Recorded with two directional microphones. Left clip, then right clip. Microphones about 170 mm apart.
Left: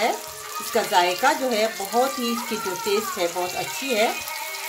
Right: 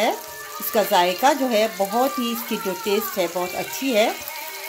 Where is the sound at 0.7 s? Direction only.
40° right (ahead or behind).